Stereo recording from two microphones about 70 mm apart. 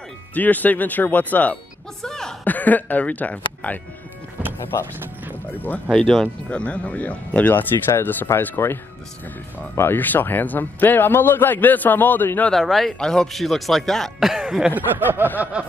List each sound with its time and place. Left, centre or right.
0.3 s a man's voice: left
2.0 s a sound: centre
2.4 s a man's voice: left
5.5 s a man's voice: left
5.9 s speech: centre
6.5 s a man's voice: centre
9.8 s a man's voice: left
12.4 s speech: centre
15.0 s a sound: right